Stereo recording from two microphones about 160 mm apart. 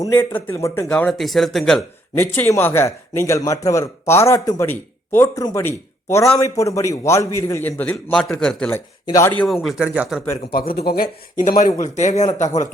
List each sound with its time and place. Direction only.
0.0 s a man's voice: 15° left (ahead or behind)
0.9 s speech: 5° left (ahead or behind)
2.1 s a man's voice: 15° left (ahead or behind)
9.0 s speech: 20° left (ahead or behind)
9.4 s speech: centre (ahead or behind)
10.5 s speech: 70° left (ahead or behind)
11.6 s speech: 50° left (ahead or behind)